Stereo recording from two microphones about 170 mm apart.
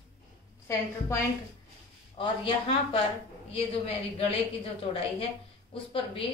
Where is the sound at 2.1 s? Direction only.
30° left (ahead or behind).